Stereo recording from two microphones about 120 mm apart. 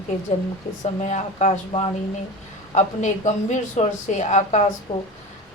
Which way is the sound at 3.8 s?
80° left.